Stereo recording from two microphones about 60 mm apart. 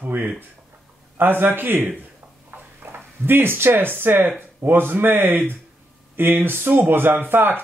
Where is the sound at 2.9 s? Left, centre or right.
Right.